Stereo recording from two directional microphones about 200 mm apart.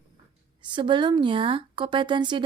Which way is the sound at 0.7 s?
25° right (ahead or behind).